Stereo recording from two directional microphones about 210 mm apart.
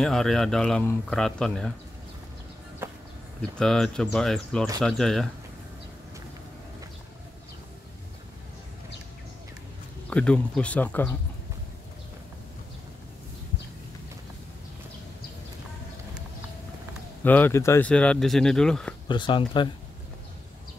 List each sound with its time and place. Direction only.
0.0 s speech: centre (ahead or behind)
3.5 s speech: centre (ahead or behind)
10.0 s speech: 5° left (ahead or behind)
17.2 s speech: 10° left (ahead or behind)
19.0 s speech: 20° left (ahead or behind)